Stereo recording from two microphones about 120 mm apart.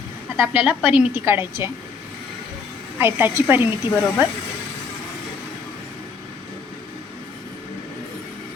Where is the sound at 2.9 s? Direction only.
20° right (ahead or behind).